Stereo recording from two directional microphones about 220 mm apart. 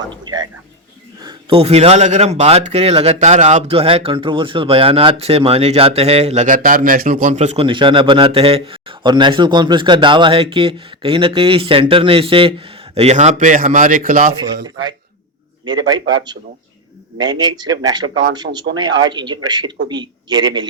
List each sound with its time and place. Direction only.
0.1 s speech: 20° right (ahead or behind); by 14.3 s 40° right (ahead or behind)
17.2 s speech: 20° right (ahead or behind)
18.5 s speech: 35° right (ahead or behind)
18.8 s speech: 20° right (ahead or behind)